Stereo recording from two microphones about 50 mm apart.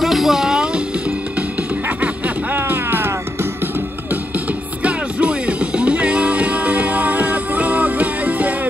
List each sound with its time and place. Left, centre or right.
0.0 s music: centre
1.9 s music: right
2.5 s music: right
4.8 s music: right